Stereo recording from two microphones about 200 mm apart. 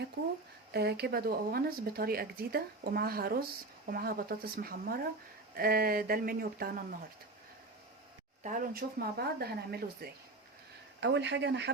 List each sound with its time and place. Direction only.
0.7 s speech: 55° right (ahead or behind)
8.4 s speech: 45° right (ahead or behind); by 11.7 s 60° right (ahead or behind)